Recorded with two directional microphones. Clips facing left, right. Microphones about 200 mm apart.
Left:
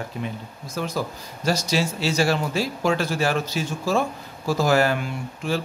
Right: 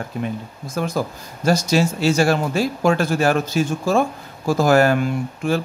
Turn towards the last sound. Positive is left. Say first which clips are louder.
# right 6 dB
turn(degrees=-50)  # may be behind; listen again after turning